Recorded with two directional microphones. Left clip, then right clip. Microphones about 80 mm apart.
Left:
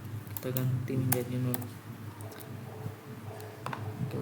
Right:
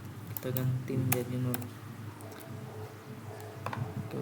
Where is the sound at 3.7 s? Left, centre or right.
Right.